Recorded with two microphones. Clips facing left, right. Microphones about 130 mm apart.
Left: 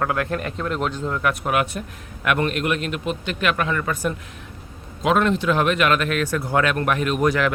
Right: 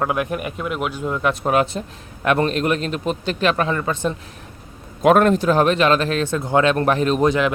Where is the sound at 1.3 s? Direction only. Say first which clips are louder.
Right 4 dB; 30° right (ahead or behind).